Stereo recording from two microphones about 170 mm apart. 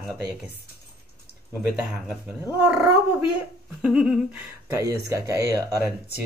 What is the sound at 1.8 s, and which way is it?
A man's voice, 5° right (ahead or behind).